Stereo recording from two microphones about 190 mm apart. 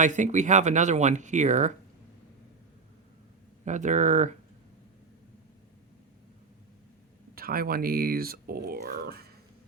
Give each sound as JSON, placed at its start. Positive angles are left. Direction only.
{"t": 0.0, "sound": "speech", "side_deg": -40}
{"t": 3.6, "sound": "speech", "side_deg": -40}
{"t": 7.3, "sound": "speech", "side_deg": -50}